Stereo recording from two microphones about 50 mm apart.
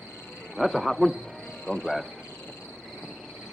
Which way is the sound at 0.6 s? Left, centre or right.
Centre.